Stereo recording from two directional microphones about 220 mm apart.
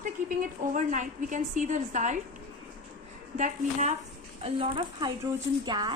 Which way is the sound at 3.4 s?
35° right (ahead or behind).